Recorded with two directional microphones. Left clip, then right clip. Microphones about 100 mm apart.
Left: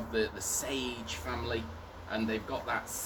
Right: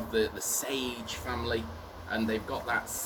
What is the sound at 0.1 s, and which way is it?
Speech, 30° left (ahead or behind).